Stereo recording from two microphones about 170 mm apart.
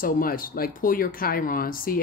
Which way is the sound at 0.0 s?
55° left (ahead or behind).